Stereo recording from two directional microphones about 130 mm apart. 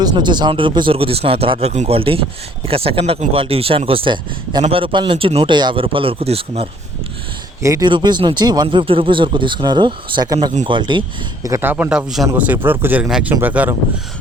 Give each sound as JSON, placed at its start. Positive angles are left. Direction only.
{"t": 0.0, "sound": "speech", "side_deg": -35}
{"t": 2.0, "sound": "speech", "side_deg": -45}
{"t": 7.6, "sound": "speech", "side_deg": -25}
{"t": 7.9, "sound": "speech", "side_deg": -35}
{"t": 11.4, "sound": "speech", "side_deg": -20}
{"t": 12.3, "sound": "speech", "side_deg": -15}
{"t": 13.1, "sound": "speech", "side_deg": -5}